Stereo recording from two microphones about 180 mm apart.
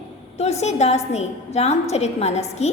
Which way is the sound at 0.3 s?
40° left (ahead or behind).